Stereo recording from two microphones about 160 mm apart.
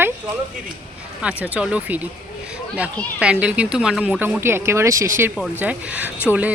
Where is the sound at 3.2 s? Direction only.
5° right (ahead or behind).